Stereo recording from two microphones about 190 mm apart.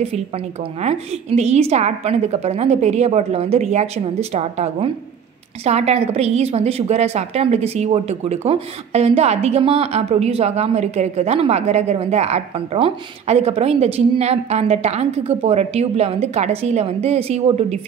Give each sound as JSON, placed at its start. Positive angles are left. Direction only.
{"t": 0.7, "sound": "a woman's voice", "side_deg": -35}